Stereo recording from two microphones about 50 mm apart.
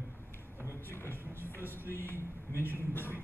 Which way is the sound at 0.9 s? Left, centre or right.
Left.